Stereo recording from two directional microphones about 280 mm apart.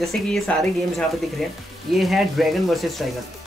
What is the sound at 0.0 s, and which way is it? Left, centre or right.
Speech, centre.